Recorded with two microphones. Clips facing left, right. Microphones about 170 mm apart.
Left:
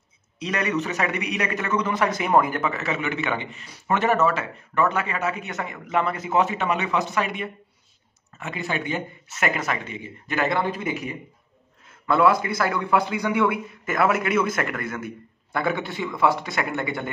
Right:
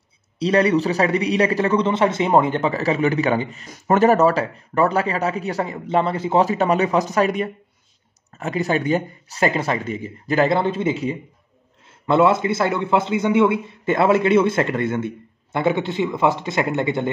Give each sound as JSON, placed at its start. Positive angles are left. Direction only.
{"t": 0.4, "sound": "a man's voice", "side_deg": -30}